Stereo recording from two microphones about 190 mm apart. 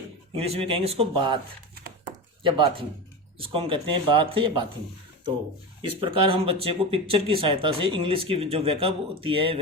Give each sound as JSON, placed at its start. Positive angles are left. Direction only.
{"t": 0.3, "sound": "speech", "side_deg": -30}
{"t": 2.4, "sound": "speech", "side_deg": -25}
{"t": 6.0, "sound": "speech", "side_deg": -30}